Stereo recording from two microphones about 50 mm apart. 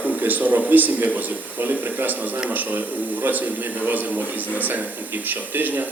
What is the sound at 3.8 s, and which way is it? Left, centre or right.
Speech, right.